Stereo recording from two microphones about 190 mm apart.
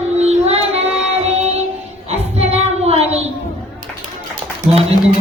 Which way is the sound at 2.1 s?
35° right (ahead or behind).